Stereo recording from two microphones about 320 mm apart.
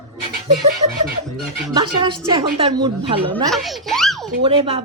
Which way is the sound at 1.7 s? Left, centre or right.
Centre.